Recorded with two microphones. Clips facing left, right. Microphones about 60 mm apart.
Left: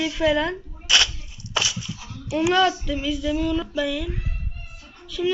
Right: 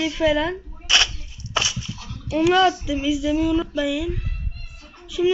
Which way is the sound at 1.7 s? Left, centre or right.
Centre.